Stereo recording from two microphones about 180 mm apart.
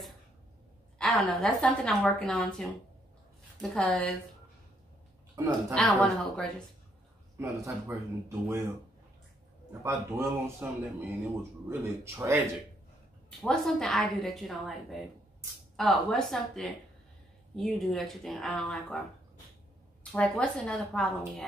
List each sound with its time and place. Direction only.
0.9 s a woman's voice: 5° left (ahead or behind)
3.7 s a woman's voice: 5° left (ahead or behind)
5.3 s speech: 15° right (ahead or behind)
5.8 s a woman's voice: 5° left (ahead or behind)
7.3 s speech: 15° right (ahead or behind)
9.8 s speech: 15° right (ahead or behind)
11.7 s speech: 15° right (ahead or behind)
13.4 s a woman's voice: centre (ahead or behind)
20.0 s a woman's voice: 5° left (ahead or behind)